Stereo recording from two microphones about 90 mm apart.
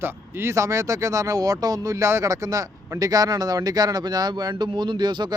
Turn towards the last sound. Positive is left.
turn(degrees=-55)  # may be behind; listen again after turning